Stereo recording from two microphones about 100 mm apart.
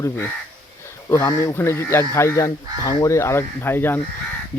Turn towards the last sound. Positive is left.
turn(degrees=20)  # may be behind; listen again after turning